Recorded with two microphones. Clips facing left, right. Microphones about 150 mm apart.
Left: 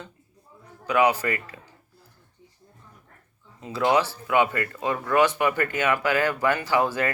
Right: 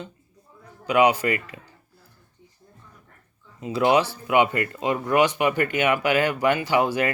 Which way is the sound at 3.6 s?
15° right (ahead or behind).